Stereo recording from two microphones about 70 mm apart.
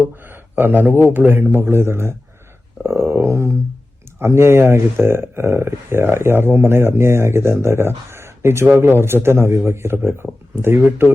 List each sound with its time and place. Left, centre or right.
0.0 s speech: right